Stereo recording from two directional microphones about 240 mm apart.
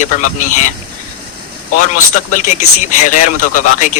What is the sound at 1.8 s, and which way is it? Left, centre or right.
A man's voice, left.